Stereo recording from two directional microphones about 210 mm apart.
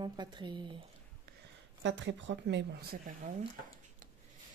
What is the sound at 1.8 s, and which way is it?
Speech, 60° right (ahead or behind).